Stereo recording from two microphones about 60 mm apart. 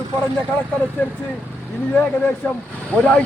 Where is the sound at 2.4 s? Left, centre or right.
Left.